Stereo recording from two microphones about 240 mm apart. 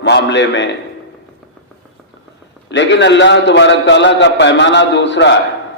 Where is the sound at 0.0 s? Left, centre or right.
Left.